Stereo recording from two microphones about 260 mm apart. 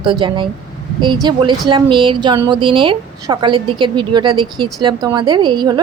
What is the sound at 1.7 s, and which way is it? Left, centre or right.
A woman's voice, centre.